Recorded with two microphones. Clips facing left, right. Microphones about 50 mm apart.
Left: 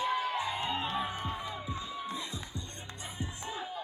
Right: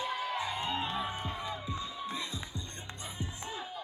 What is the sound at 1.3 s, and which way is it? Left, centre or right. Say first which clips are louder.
Music: even; left.